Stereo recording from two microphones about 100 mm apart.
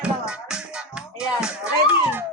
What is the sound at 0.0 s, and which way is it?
Music, 10° right (ahead or behind).